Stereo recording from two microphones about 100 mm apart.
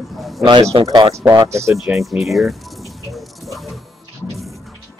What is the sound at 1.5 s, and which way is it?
Speech, 30° right (ahead or behind).